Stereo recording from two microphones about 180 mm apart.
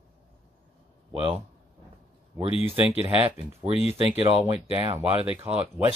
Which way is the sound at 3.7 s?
35° left (ahead or behind).